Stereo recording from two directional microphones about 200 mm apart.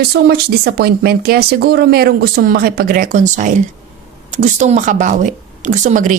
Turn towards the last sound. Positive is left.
turn(degrees=-40)  # may be behind; listen again after turning